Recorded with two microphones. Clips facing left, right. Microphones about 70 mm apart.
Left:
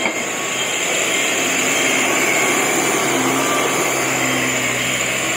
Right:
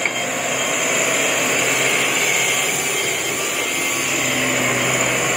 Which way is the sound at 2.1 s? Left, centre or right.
Left.